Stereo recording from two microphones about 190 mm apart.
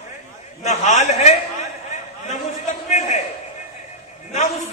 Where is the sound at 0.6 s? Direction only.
40° left (ahead or behind).